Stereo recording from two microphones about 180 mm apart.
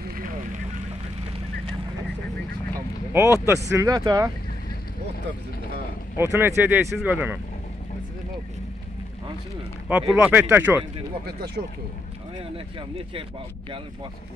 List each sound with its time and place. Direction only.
3.1 s speech: 15° right (ahead or behind)
6.1 s speech: 15° right (ahead or behind)
9.8 s speech: 10° right (ahead or behind)
11.2 s speech: 60° right (ahead or behind)